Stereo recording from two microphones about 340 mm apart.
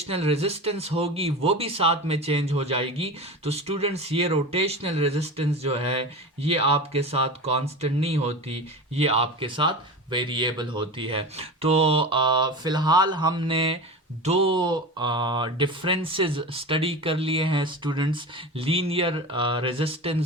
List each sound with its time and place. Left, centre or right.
0.0 s speech: centre